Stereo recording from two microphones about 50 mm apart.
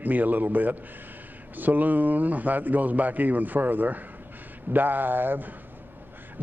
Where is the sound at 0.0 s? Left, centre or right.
Right.